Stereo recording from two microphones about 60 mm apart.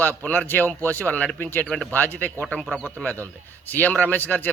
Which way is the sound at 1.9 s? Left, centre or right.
Left.